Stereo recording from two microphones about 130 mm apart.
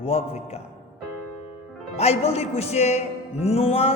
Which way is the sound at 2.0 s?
55° left (ahead or behind).